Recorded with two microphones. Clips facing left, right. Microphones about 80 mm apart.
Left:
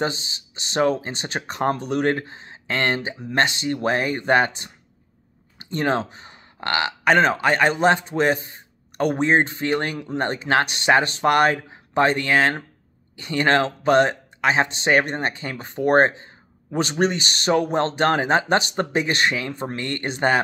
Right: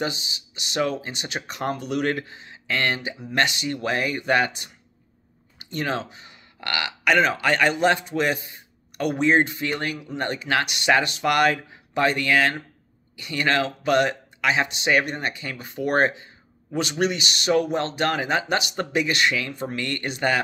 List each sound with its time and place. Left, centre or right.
0.0 s speech: left